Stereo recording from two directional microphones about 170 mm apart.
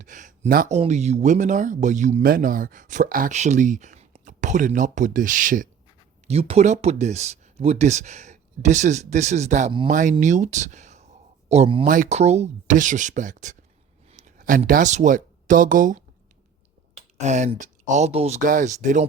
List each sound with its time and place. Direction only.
0.0 s a sound: 50° right (ahead or behind)
0.8 s speech: 40° right (ahead or behind)
6.2 s speech: 35° right (ahead or behind)
11.9 s speech: 45° right (ahead or behind)
14.1 s a sound: 45° right (ahead or behind)
14.7 s speech: 45° right (ahead or behind)